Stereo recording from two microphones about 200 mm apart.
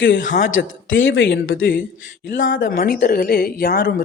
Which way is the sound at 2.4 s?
45° left (ahead or behind).